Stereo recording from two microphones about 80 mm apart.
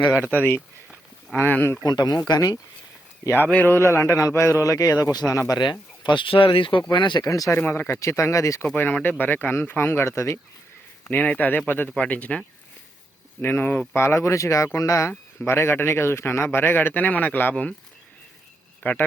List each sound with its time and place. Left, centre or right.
1.3 s speech: left
1.8 s speech: left
3.4 s speech: left
3.8 s speech: left
6.0 s speech: left
6.9 s speech: left
7.3 s speech: left
7.5 s speech: left
8.7 s speech: left
11.1 s speech: left
13.4 s speech: left
15.4 s speech: left; by 17.7 s centre